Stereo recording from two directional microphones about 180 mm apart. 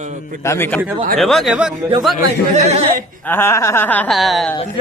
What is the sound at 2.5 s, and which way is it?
Speech, 40° right (ahead or behind).